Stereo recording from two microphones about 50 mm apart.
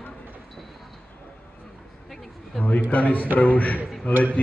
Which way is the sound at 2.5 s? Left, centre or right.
Left.